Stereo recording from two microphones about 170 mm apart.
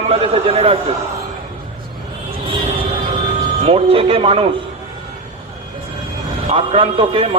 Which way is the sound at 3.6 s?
35° right (ahead or behind).